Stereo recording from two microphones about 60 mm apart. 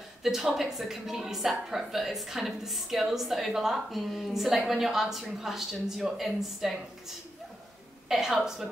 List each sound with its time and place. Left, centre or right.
0.2 s a woman's voice: centre
8.1 s a woman's voice: centre